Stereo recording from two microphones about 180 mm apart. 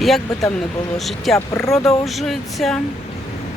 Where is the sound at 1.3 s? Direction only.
15° left (ahead or behind).